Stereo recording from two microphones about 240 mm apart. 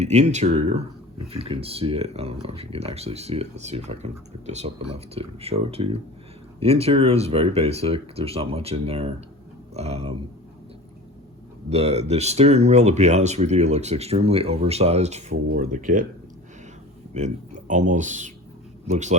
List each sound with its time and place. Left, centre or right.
0.0 s speech: right
11.7 s speech: right
17.2 s speech: right